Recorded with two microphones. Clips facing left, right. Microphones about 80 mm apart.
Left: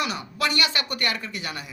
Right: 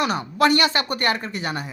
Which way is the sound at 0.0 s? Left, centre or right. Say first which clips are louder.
Right 7 dB; right.